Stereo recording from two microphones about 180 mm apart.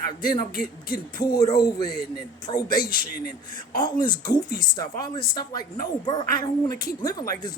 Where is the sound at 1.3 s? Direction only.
20° left (ahead or behind).